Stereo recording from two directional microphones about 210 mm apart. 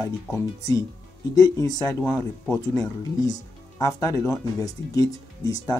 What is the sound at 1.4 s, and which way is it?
Speech, 15° left (ahead or behind).